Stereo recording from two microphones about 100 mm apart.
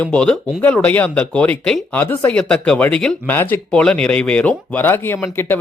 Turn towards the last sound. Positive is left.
turn(degrees=20)  # may be behind; listen again after turning